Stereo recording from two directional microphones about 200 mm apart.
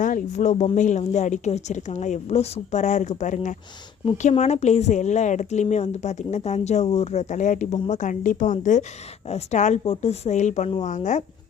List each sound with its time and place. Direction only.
0.0 s speech: 40° left (ahead or behind)